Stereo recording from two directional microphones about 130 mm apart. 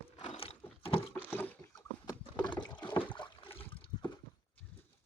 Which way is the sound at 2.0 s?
35° left (ahead or behind).